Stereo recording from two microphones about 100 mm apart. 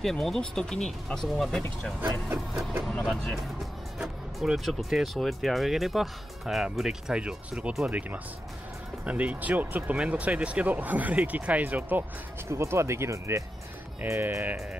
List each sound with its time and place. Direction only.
0.0 s speech: 5° left (ahead or behind); by 14.6 s 20° right (ahead or behind)